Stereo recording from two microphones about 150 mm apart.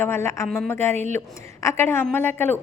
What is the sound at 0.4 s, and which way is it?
Speech, centre (ahead or behind).